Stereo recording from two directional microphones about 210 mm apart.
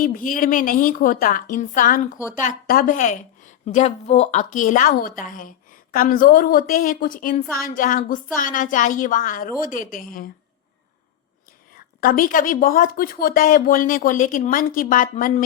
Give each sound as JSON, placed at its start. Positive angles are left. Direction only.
{"t": 0.0, "sound": "a woman's voice", "side_deg": 40}
{"t": 11.9, "sound": "a woman's voice", "side_deg": 40}